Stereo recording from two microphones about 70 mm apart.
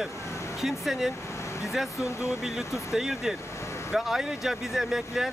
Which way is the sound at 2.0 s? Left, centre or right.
Left.